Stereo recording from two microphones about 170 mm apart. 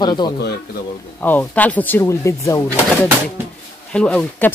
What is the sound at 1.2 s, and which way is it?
Speech, 10° left (ahead or behind).